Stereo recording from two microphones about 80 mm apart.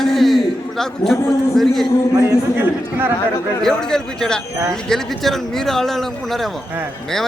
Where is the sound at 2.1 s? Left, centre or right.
Right.